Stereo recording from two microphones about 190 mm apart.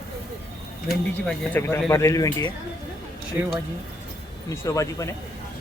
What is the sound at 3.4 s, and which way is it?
Speech, 10° right (ahead or behind).